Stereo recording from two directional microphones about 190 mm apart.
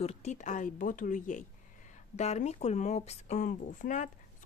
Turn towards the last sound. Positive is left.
turn(degrees=40)  # may be behind; listen again after turning